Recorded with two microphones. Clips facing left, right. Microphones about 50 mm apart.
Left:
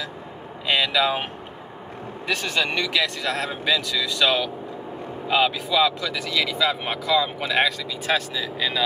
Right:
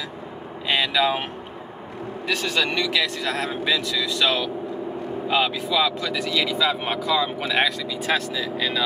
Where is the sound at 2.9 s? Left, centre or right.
Centre.